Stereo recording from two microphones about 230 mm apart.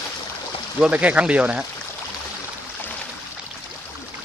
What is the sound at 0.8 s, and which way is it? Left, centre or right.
Speech, centre.